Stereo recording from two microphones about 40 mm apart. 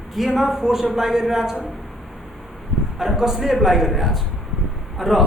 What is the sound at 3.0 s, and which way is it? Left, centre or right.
A man's voice, centre.